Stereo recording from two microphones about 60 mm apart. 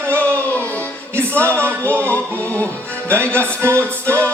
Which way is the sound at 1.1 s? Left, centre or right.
Right.